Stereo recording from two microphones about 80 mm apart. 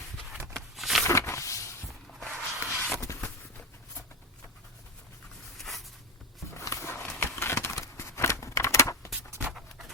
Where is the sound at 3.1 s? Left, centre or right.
Left.